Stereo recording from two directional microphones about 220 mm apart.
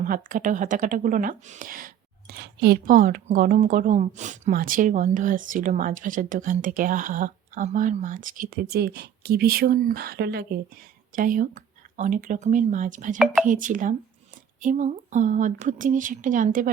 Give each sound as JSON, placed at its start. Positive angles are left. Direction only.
{"t": 0.0, "sound": "speech", "side_deg": -40}